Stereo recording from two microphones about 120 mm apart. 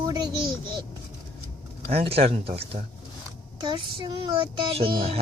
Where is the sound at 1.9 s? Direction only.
55° right (ahead or behind).